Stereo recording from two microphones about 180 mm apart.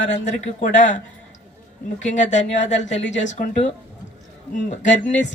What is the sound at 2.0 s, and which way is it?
Speech, 40° left (ahead or behind).